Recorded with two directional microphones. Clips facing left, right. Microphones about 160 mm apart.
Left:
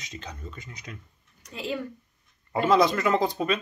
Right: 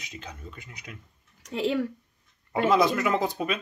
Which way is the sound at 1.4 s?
90° right.